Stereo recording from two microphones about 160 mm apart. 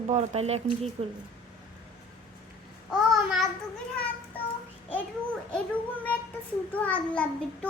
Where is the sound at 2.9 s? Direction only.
Centre (ahead or behind).